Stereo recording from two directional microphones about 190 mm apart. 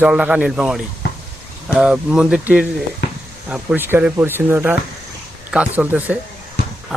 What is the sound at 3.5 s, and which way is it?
Speech, 10° right (ahead or behind).